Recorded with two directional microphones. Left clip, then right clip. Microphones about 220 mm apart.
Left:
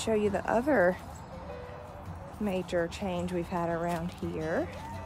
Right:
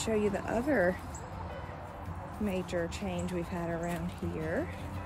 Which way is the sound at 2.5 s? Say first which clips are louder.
Left 4 dB; 20° left (ahead or behind).